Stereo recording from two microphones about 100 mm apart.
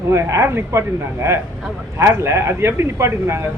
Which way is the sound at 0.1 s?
25° right (ahead or behind).